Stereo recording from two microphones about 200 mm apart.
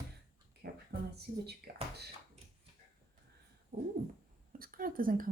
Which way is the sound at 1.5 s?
55° right (ahead or behind).